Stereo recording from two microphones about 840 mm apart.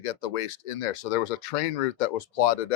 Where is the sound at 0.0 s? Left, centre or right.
Left.